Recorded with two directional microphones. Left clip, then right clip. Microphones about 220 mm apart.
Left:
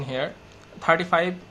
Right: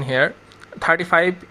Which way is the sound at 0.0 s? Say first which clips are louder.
Right 10 dB; 35° right (ahead or behind).